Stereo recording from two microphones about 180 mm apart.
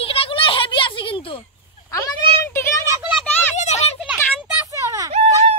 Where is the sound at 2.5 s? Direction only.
15° left (ahead or behind).